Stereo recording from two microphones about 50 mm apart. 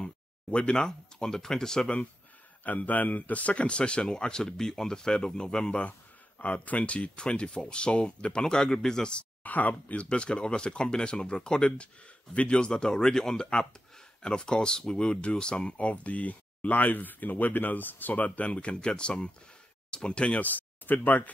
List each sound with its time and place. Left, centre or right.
0.0 s speech: left
2.6 s speech: left; by 5.8 s centre
5.8 s speech: left
9.4 s speech: left
10.0 s speech: centre
20.4 s speech: left